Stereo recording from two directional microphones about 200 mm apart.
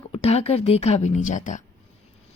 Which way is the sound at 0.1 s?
30° left (ahead or behind).